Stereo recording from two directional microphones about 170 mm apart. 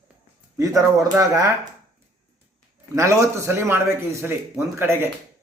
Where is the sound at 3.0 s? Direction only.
15° right (ahead or behind).